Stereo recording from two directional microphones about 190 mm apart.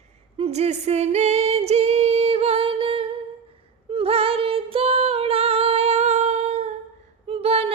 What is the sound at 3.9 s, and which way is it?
Music, 30° right (ahead or behind).